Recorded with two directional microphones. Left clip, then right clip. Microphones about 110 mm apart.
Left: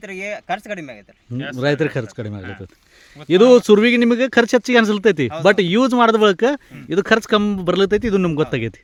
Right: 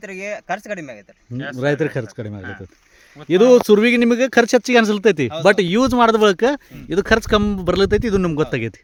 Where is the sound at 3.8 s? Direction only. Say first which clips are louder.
Even; 10° left (ahead or behind).